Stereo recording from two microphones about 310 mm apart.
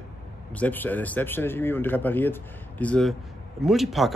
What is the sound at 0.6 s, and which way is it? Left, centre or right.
Speech, centre.